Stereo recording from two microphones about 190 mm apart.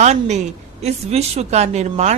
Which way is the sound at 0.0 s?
35° right (ahead or behind).